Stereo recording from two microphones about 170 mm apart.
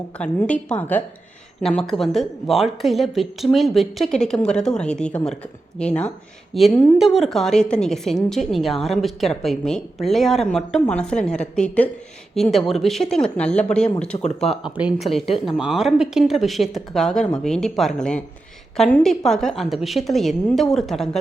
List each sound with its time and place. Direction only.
0.2 s a woman's voice: 5° left (ahead or behind)
14.1 s speech: 25° left (ahead or behind)
14.5 s a woman's voice: 5° right (ahead or behind)